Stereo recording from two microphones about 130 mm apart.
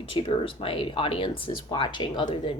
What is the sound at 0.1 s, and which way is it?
Speech, 40° left (ahead or behind).